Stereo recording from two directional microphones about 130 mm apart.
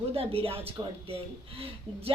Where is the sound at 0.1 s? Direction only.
45° right (ahead or behind).